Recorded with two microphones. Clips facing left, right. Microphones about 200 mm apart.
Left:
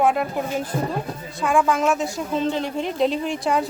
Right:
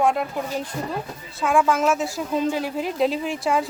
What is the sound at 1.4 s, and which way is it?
A woman's voice, centre (ahead or behind).